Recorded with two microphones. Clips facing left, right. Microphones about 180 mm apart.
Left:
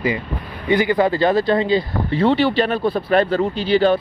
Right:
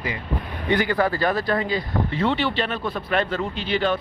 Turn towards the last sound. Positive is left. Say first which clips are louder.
# left 7 dB
turn(degrees=35)  # may be behind; listen again after turning